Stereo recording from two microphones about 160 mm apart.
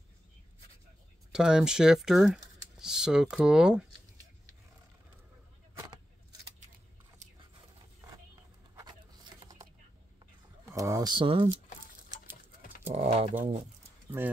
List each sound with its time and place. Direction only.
1.3 s speech: 5° right (ahead or behind)
10.6 s a sound: 20° right (ahead or behind)
12.9 s speech: 40° right (ahead or behind)
14.2 s speech: 15° right (ahead or behind)